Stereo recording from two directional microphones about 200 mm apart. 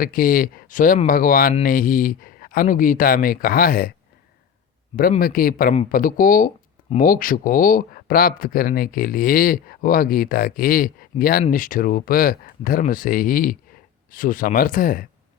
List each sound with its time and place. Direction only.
0.0 s speech: 45° left (ahead or behind)
5.2 s speech: 45° left (ahead or behind)